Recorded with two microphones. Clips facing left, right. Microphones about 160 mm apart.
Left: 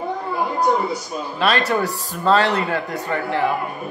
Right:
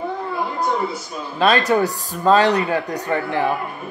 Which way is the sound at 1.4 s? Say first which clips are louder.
Right 3 dB; 20° right (ahead or behind).